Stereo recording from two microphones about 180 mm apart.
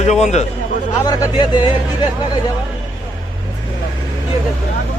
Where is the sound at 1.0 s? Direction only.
25° left (ahead or behind).